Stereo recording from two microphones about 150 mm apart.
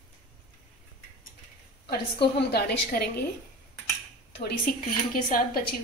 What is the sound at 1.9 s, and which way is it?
Speech, 90° left.